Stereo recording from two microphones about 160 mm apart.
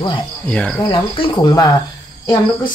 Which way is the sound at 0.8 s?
30° left (ahead or behind).